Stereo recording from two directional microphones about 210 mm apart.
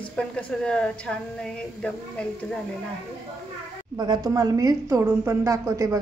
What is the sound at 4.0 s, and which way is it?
A woman's voice, 20° right (ahead or behind).